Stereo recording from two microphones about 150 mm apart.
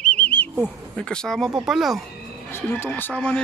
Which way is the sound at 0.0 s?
10° left (ahead or behind).